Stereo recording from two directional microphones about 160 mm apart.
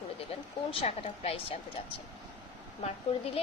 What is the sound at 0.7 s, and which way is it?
Speech, 40° left (ahead or behind).